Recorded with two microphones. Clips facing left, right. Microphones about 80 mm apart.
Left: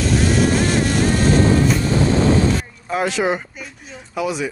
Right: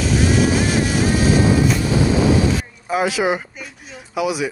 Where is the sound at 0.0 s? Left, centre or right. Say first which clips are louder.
Even; centre.